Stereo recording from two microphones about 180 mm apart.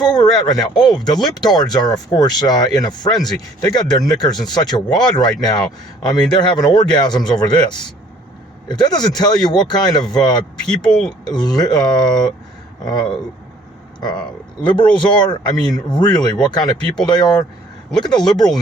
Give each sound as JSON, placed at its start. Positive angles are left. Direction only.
{"t": 0.0, "sound": "speech", "side_deg": 20}
{"t": 14.0, "sound": "speech", "side_deg": 25}